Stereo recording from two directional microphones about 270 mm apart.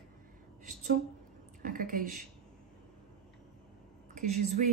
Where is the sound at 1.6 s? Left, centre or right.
Right.